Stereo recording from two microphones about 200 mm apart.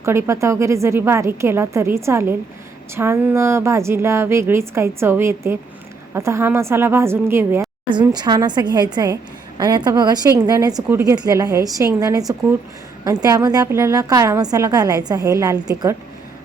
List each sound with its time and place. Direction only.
0.0 s a woman's voice: 15° right (ahead or behind)